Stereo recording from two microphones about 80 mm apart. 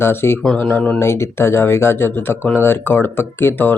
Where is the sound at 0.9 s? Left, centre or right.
Left.